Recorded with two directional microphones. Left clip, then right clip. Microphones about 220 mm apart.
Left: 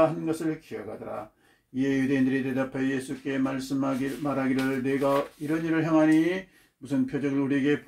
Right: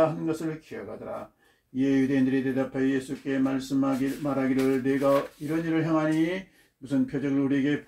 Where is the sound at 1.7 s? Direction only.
50° left (ahead or behind).